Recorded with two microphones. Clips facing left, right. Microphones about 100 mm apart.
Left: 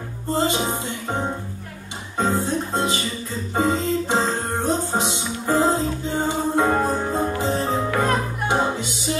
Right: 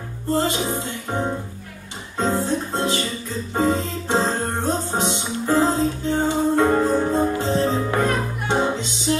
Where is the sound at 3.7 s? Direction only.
15° left (ahead or behind).